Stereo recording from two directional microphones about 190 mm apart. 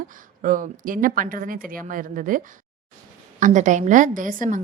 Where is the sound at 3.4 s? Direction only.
40° right (ahead or behind).